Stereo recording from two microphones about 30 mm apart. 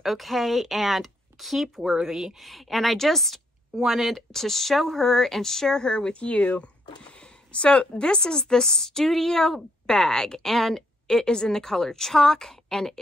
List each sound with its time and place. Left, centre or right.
0.0 s speech: centre
2.4 s speech: centre
3.7 s speech: centre
4.1 s speech: centre; by 6.2 s left
6.2 s speech: left
7.0 s speech: left
8.2 s speech: left
10.5 s speech: centre
11.1 s speech: centre